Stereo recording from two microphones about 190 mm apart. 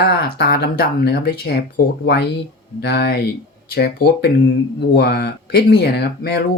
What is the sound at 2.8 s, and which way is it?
Speech, 55° left (ahead or behind).